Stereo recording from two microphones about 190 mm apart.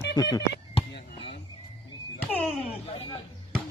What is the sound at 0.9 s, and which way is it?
Basketball bounce, 60° left (ahead or behind).